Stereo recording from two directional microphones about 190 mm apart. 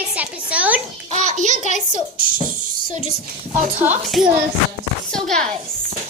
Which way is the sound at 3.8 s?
10° right (ahead or behind).